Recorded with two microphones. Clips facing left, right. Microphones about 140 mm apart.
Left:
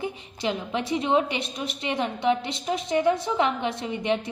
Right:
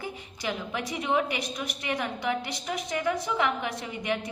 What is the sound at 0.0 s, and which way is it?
A woman's voice, 25° left (ahead or behind).